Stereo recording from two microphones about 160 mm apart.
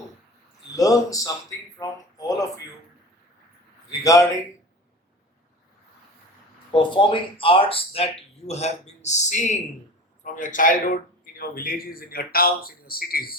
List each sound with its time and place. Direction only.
0.8 s speech: 20° left (ahead or behind)
4.0 s a man's voice: 20° left (ahead or behind)
6.7 s speech: 30° left (ahead or behind); by 13.3 s 65° left (ahead or behind)